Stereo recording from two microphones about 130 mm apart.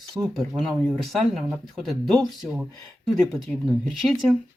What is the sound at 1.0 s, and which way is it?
Speech, centre (ahead or behind).